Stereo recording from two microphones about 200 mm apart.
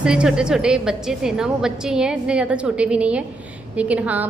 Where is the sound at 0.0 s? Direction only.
5° right (ahead or behind).